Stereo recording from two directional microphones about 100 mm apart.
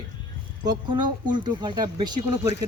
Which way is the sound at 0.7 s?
50° right (ahead or behind).